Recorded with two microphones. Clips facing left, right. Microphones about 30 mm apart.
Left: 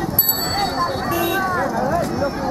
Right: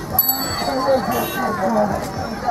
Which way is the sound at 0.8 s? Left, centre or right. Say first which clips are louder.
Right 3 dB; centre.